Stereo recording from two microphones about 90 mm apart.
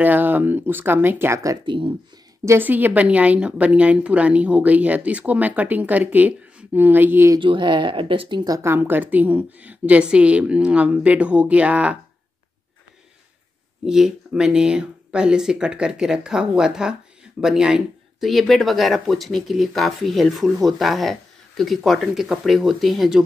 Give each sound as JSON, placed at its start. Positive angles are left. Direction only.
{"t": 0.0, "sound": "speech", "side_deg": -20}
{"t": 1.7, "sound": "speech", "side_deg": -85}
{"t": 2.4, "sound": "a woman's voice", "side_deg": -25}
{"t": 7.3, "sound": "speech", "side_deg": -60}
{"t": 8.6, "sound": "a woman's voice", "side_deg": -25}
{"t": 13.8, "sound": "a woman's voice", "side_deg": -5}